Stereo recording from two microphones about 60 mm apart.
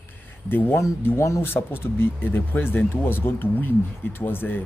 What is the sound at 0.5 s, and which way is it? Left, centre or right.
Speech, left.